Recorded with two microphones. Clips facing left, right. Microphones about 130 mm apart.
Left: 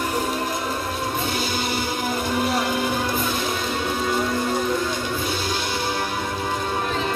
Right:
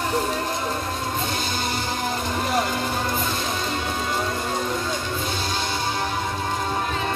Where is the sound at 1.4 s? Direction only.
5° left (ahead or behind).